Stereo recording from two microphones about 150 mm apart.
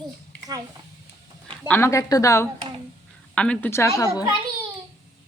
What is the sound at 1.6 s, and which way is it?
Speech, 15° left (ahead or behind).